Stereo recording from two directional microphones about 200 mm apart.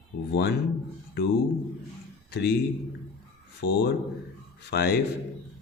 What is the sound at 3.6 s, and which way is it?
A man's voice, 55° left (ahead or behind).